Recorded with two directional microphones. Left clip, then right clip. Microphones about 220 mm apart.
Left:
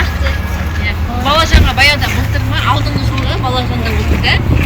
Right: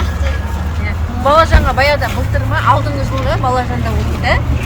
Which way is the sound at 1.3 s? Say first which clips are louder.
Right 2 dB; 25° right (ahead or behind).